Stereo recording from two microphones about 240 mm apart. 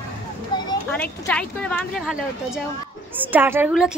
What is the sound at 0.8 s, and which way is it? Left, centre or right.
A woman's voice, centre.